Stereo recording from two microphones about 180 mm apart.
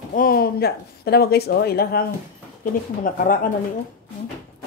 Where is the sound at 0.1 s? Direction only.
55° left (ahead or behind).